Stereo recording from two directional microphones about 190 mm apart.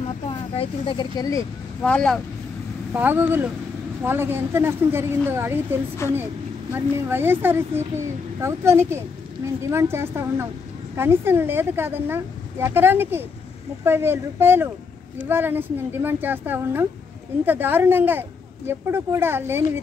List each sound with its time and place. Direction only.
0.3 s speech: 30° left (ahead or behind)
1.8 s speech: 5° left (ahead or behind)
2.9 s a woman's voice: 10° right (ahead or behind)
6.0 s a woman's voice: 15° left (ahead or behind)
6.7 s a woman's voice: 10° right (ahead or behind)